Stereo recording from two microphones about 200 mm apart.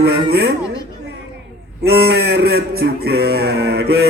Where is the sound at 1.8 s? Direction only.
50° right (ahead or behind).